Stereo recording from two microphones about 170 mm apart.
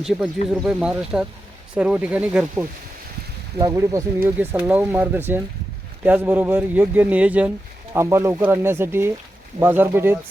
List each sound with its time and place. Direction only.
0.0 s a man's voice: centre (ahead or behind)